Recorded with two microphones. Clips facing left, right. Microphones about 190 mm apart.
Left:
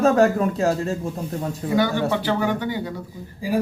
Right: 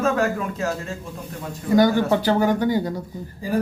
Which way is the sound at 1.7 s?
40° right (ahead or behind).